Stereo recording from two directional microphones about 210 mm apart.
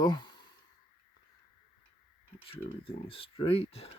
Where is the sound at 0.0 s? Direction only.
20° left (ahead or behind).